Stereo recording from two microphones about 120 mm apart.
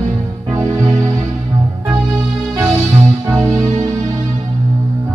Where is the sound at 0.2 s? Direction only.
25° right (ahead or behind).